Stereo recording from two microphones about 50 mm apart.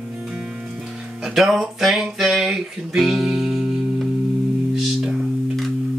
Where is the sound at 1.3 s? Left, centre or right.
Centre.